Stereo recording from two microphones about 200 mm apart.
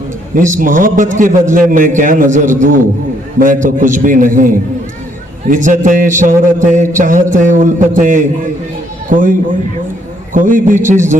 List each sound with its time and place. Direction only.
0.3 s a man's voice: 40° right (ahead or behind)
10.3 s a man's voice: 40° right (ahead or behind)